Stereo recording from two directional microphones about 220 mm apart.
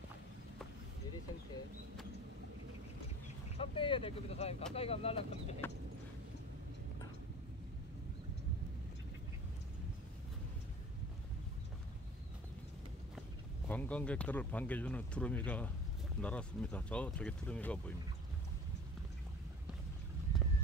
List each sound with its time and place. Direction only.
3.5 s speech: 25° left (ahead or behind)
13.7 s speech: 5° left (ahead or behind)